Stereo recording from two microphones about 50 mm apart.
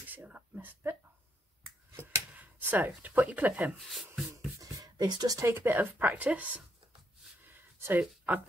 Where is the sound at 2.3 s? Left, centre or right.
Right.